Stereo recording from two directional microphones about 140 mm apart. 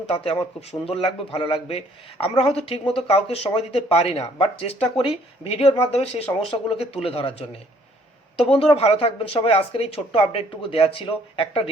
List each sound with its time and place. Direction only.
0.1 s a woman's voice: 45° left (ahead or behind)
8.4 s speech: 40° left (ahead or behind)